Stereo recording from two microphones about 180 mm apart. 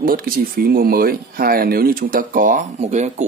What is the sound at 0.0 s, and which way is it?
Speech, 50° right (ahead or behind).